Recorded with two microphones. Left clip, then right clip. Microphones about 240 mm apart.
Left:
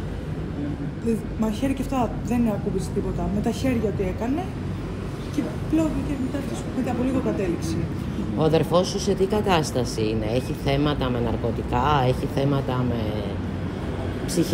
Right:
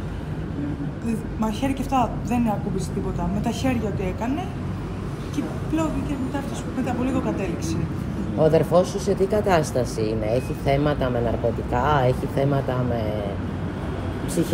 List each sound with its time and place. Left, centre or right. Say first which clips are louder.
1.0 s a woman's voice: left 2 dB; right
3.4 s a woman's voice: left 1 dB; right
5.3 s a woman's voice: left 2 dB; right
8.4 s speech: right 3 dB; centre
8.9 s speech: right 1 dB; centre
10.0 s speech: right 1 dB; centre